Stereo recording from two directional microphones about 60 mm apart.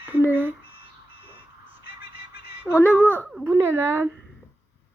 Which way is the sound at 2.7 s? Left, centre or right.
Left.